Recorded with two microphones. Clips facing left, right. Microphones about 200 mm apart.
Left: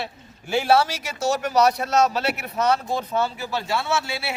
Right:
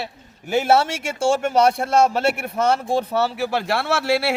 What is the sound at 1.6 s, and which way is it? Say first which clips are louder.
Speech: right 1 dB; 55° right (ahead or behind).